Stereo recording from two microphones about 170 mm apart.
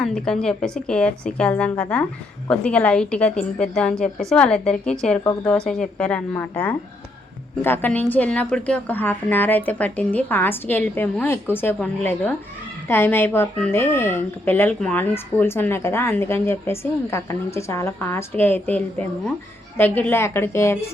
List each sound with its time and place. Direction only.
0.0 s a woman's voice: 5° left (ahead or behind)
5.2 s speech: 15° left (ahead or behind)
5.5 s speech: 5° left (ahead or behind)